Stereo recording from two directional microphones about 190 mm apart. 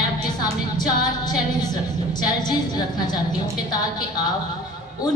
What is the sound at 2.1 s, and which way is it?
A woman's voice, 20° left (ahead or behind).